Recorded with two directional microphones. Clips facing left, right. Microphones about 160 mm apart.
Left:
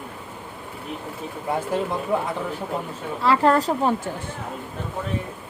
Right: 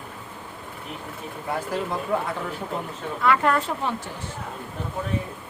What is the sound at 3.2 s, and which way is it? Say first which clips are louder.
Speech: left 3 dB; 30° left (ahead or behind).